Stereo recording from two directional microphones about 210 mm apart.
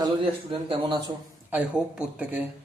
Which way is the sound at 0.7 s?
20° right (ahead or behind).